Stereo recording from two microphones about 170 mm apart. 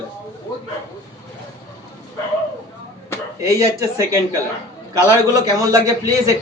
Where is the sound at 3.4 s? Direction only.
20° right (ahead or behind).